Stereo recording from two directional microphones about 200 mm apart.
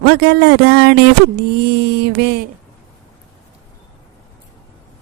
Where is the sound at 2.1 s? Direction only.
50° right (ahead or behind).